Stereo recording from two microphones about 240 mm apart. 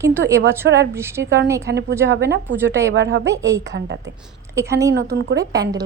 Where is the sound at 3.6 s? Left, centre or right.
Right.